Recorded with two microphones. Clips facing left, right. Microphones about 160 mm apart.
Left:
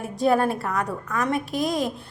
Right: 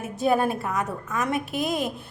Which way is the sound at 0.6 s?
20° right (ahead or behind).